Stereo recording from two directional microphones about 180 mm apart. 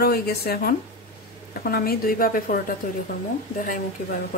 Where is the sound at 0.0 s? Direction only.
60° left (ahead or behind).